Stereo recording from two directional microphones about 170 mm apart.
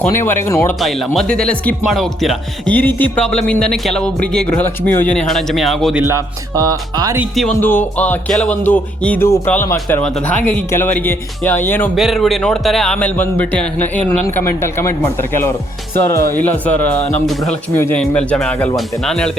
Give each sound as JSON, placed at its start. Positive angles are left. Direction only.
{"t": 0.0, "sound": "speech", "side_deg": 15}
{"t": 0.8, "sound": "speech", "side_deg": 0}
{"t": 6.0, "sound": "speech", "side_deg": -15}
{"t": 7.2, "sound": "speech", "side_deg": 0}
{"t": 7.6, "sound": "speech", "side_deg": 10}
{"t": 11.9, "sound": "speech", "side_deg": 0}
{"t": 16.1, "sound": "speech", "side_deg": 15}